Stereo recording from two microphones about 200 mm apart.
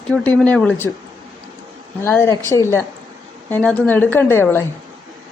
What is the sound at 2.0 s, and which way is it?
A woman's voice, 10° left (ahead or behind).